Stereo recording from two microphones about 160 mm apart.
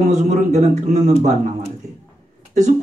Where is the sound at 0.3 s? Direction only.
50° right (ahead or behind).